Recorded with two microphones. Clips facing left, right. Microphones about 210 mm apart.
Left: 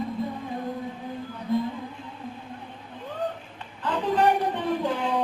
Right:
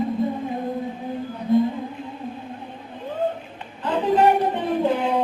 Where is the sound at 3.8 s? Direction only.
20° right (ahead or behind).